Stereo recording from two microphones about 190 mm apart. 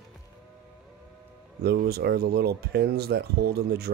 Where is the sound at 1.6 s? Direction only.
55° right (ahead or behind).